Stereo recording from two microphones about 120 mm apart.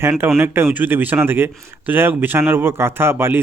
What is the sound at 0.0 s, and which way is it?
Speech, 20° right (ahead or behind).